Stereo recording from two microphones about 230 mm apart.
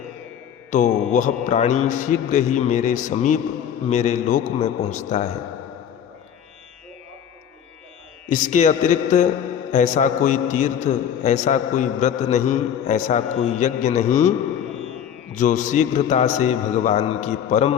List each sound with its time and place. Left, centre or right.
0.7 s a man's voice: left
8.3 s a man's voice: left
15.4 s a man's voice: left